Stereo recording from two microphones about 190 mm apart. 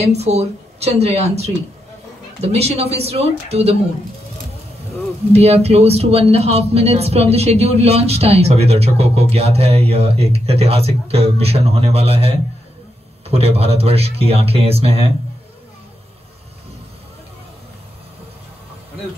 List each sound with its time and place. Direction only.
0.1 s speech: 35° right (ahead or behind)
5.3 s speech: 35° right (ahead or behind)